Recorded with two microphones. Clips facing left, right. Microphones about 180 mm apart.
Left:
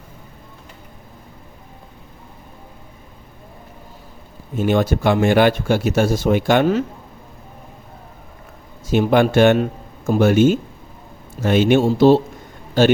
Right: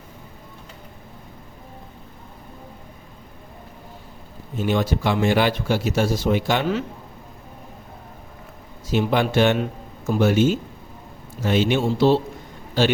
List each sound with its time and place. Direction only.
4.5 s speech: 50° left (ahead or behind)
8.9 s speech: 50° left (ahead or behind)